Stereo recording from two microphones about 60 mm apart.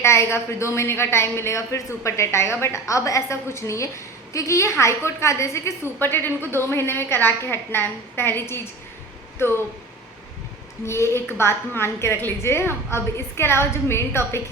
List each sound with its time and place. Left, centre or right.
0.0 s a woman's voice: left
6.0 s a woman's voice: left
10.8 s a woman's voice: left